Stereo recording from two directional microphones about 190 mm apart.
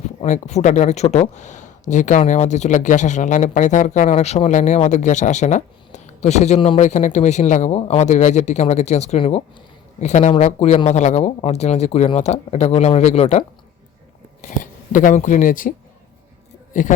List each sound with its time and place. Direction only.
0.2 s speech: 40° left (ahead or behind)
14.4 s speech: 45° left (ahead or behind)
16.7 s a man's voice: 45° left (ahead or behind)